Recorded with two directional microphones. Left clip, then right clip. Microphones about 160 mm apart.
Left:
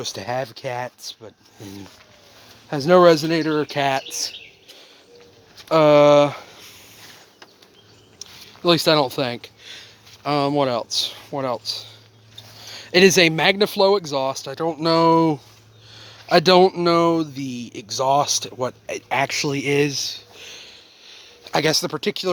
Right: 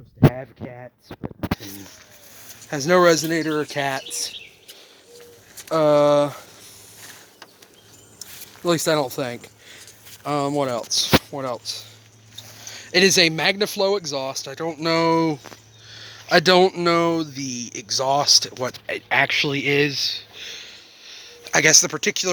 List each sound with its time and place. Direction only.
0.0 s speech: 50° left (ahead or behind)
2.6 s a man's voice: 30° left (ahead or behind)
5.6 s speech: 40° left (ahead or behind)
8.6 s a man's voice: 30° left (ahead or behind)
15.9 s a sound: 25° left (ahead or behind)
16.3 s speech: 20° left (ahead or behind)